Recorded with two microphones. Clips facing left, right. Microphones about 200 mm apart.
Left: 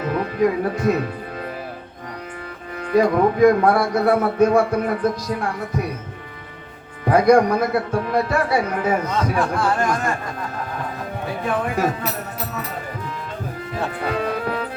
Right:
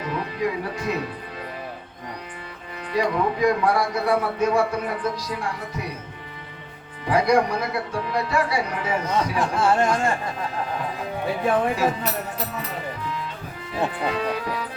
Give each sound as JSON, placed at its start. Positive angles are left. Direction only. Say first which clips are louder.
{"t": 0.0, "sound": "music", "louder": "left 6 dB", "side_deg": 50}
{"t": 2.9, "sound": "a man's voice", "louder": "left 6 dB", "side_deg": 50}
{"t": 7.1, "sound": "a man's voice", "louder": "left 5 dB", "side_deg": 50}
{"t": 9.6, "sound": "speech", "louder": "right 1 dB", "side_deg": -25}
{"t": 14.0, "sound": "speech", "louder": "left 2 dB", "side_deg": 45}